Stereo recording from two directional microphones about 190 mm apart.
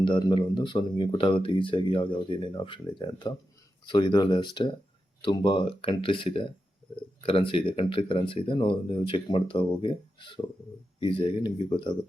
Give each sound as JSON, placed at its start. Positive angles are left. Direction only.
{"t": 0.0, "sound": "speech", "side_deg": 25}